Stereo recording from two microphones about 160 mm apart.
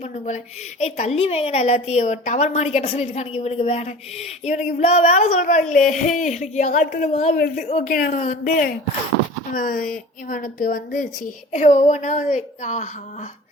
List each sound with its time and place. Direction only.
0.8 s a woman's voice: 40° left (ahead or behind)
7.3 s speech: 75° left (ahead or behind)
7.7 s a woman's voice: 50° left (ahead or behind)